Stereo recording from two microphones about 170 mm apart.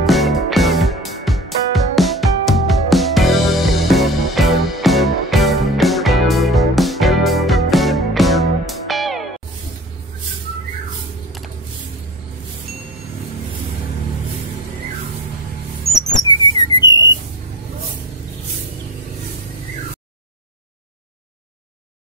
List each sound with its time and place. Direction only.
0.0 s music: centre (ahead or behind)
15.8 s rodents: 40° left (ahead or behind)
16.2 s a sound: 25° left (ahead or behind)